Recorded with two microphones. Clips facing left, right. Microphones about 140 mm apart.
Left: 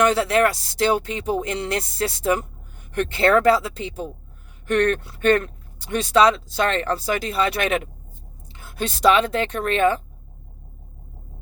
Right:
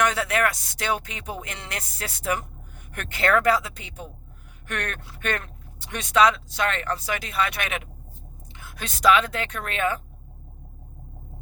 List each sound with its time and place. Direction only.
0.0 s speech: 30° left (ahead or behind)